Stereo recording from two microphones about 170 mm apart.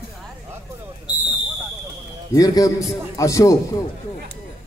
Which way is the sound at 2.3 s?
20° left (ahead or behind).